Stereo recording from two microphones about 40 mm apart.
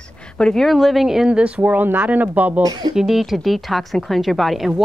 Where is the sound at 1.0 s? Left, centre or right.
Centre.